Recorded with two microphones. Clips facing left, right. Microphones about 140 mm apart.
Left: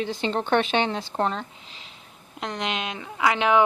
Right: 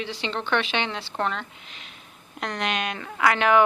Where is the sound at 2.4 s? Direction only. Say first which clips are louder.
Right 1 dB; 20° left (ahead or behind).